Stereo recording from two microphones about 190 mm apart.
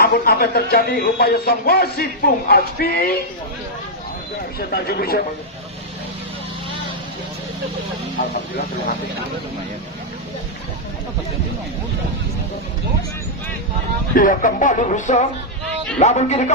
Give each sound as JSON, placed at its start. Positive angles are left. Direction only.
{"t": 0.0, "sound": "speech", "side_deg": 55}
{"t": 4.7, "sound": "speech", "side_deg": 55}
{"t": 14.2, "sound": "speech", "side_deg": 45}